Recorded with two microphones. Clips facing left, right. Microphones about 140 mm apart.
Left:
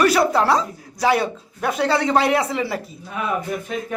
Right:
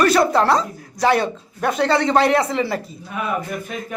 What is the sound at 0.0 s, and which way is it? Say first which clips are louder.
A man's voice: right 1 dB; 5° left (ahead or behind).